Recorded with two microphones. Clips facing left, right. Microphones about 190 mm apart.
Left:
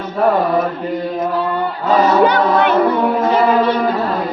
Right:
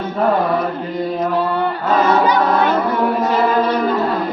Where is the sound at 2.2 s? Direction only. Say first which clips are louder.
Left 2 dB; 65° left (ahead or behind).